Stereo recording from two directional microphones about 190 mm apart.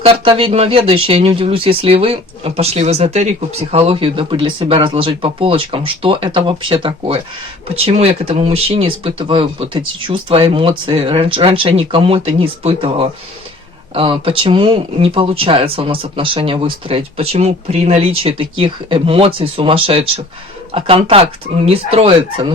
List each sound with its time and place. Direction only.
0.0 s speech: 30° right (ahead or behind)